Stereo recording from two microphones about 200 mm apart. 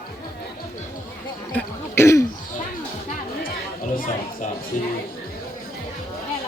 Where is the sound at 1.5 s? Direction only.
15° left (ahead or behind).